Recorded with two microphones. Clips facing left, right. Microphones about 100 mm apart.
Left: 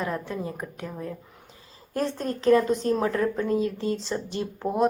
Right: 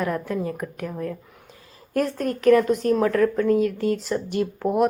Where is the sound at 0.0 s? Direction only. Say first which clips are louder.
Right 4 dB; 20° left (ahead or behind).